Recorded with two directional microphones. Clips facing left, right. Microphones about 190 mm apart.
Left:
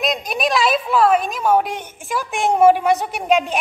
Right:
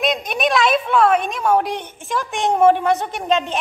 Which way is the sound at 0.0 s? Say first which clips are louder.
Right 1 dB; centre (ahead or behind).